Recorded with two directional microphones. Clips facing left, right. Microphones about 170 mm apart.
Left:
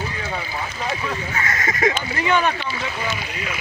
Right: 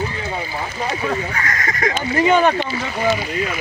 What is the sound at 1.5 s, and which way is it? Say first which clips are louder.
Speech: left 3 dB; 25° left (ahead or behind).